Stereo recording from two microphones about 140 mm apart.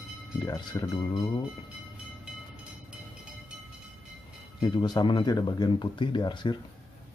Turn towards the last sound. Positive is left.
turn(degrees=35)  # may be behind; listen again after turning